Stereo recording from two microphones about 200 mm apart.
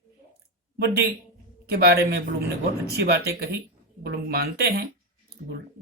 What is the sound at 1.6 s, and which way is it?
Speech, 50° right (ahead or behind).